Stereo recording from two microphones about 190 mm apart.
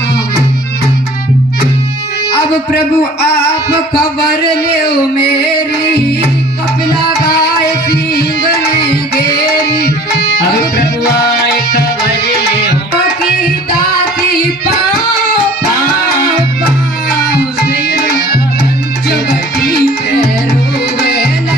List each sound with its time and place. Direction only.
2.7 s a man's voice: 60° left (ahead or behind)
4.8 s music: 60° left (ahead or behind)
17.7 s tabla: 60° left (ahead or behind)
19.0 s music: 55° left (ahead or behind)